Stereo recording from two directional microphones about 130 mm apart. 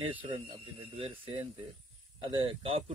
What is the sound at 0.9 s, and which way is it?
Speech, 45° right (ahead or behind).